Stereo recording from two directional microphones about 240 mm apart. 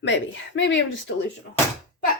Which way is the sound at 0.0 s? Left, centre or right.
Left.